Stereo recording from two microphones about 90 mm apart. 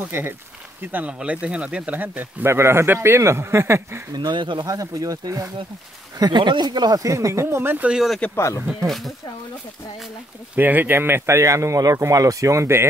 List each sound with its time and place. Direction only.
0.1 s speech: 25° right (ahead or behind)
0.9 s speech: 15° right (ahead or behind); by 4.0 s 30° right (ahead or behind)
4.1 s speech: 60° right (ahead or behind)
4.6 s speech: 40° right (ahead or behind)
6.1 s speech: 55° right (ahead or behind); by 7.9 s 20° right (ahead or behind)
7.9 s speech: 5° right (ahead or behind)
8.4 s speech: 35° left (ahead or behind)
8.6 s speech: centre (ahead or behind)
10.5 s speech: 20° right (ahead or behind)